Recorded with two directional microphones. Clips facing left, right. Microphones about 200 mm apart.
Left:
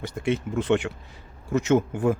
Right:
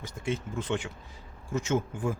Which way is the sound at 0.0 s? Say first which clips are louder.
Left 7 dB; 65° left (ahead or behind).